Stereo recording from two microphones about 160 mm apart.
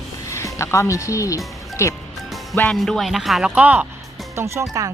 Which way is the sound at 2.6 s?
5° left (ahead or behind).